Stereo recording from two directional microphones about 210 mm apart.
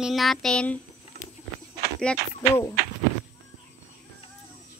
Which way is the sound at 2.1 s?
5° left (ahead or behind).